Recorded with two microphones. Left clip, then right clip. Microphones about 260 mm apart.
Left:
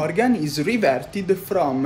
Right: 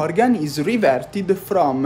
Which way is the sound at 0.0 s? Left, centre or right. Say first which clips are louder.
Right 3 dB; centre.